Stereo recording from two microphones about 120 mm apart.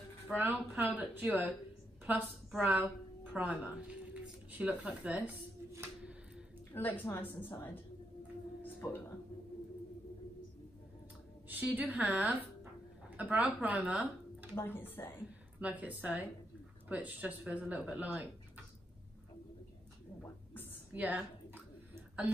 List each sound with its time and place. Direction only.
0.3 s speech: 15° right (ahead or behind)
2.5 s speech: 5° right (ahead or behind)
6.7 s a woman's voice: 15° left (ahead or behind)
11.4 s speech: 15° right (ahead or behind)
14.5 s a woman's voice: 20° left (ahead or behind)
15.2 s a woman's voice: 10° right (ahead or behind)
20.9 s a sound: 10° right (ahead or behind)